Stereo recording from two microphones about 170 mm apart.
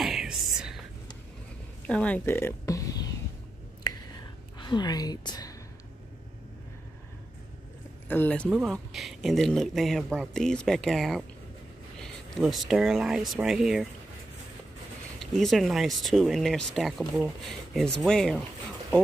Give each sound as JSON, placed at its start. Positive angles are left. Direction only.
{"t": 0.0, "sound": "whispering", "side_deg": 0}
{"t": 1.9, "sound": "a sound", "side_deg": 5}
{"t": 3.8, "sound": "whispering", "side_deg": 25}
{"t": 8.1, "sound": "speech", "side_deg": 10}
{"t": 15.1, "sound": "speech", "side_deg": 0}